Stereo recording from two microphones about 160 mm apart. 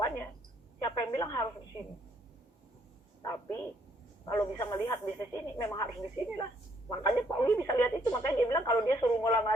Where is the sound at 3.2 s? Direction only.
20° left (ahead or behind).